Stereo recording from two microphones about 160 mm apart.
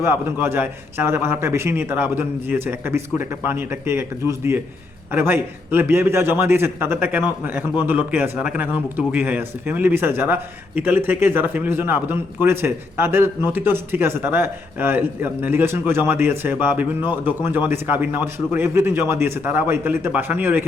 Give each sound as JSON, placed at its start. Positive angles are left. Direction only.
{"t": 0.0, "sound": "a man's voice", "side_deg": -15}